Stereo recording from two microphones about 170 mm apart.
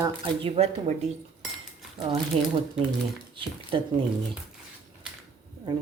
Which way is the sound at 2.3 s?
40° right (ahead or behind).